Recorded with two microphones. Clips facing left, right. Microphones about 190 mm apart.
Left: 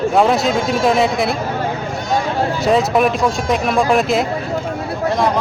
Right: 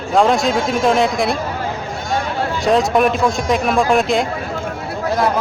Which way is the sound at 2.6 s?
Centre (ahead or behind).